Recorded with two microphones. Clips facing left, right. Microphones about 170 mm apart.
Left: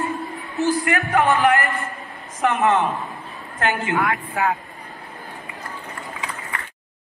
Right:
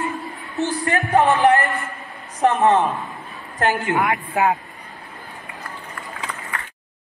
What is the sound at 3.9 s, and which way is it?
Speech, 20° right (ahead or behind).